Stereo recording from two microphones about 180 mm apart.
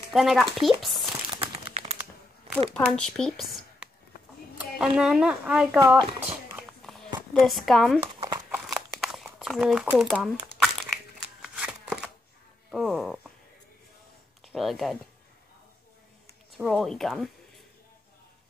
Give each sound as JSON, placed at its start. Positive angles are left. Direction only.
{"t": 0.1, "sound": "speech", "side_deg": 0}
{"t": 1.3, "sound": "crumpling", "side_deg": -30}
{"t": 2.7, "sound": "speech", "side_deg": 5}
{"t": 6.8, "sound": "a sound", "side_deg": 0}
{"t": 8.6, "sound": "crumpling", "side_deg": 0}
{"t": 11.4, "sound": "a sound", "side_deg": -5}
{"t": 12.7, "sound": "speech", "side_deg": 0}
{"t": 14.4, "sound": "speech", "side_deg": 0}
{"t": 16.5, "sound": "speech", "side_deg": 0}